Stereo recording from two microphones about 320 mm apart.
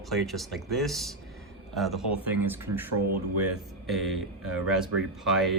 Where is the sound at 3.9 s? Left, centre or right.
Centre.